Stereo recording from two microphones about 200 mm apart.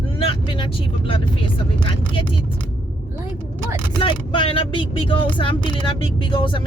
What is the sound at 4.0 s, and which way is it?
Speech, 25° left (ahead or behind).